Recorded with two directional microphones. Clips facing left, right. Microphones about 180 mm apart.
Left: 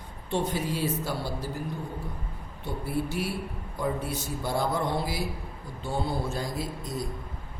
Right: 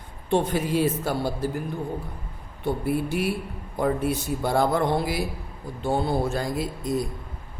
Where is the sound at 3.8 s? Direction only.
60° right (ahead or behind).